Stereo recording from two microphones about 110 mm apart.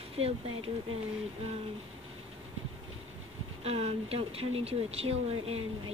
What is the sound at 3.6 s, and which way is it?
Speech, 65° right (ahead or behind).